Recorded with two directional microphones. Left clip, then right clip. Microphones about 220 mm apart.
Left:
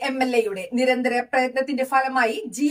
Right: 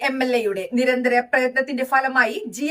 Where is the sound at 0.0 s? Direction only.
10° right (ahead or behind).